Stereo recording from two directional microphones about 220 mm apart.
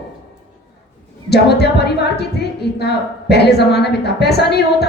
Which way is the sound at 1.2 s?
50° left (ahead or behind).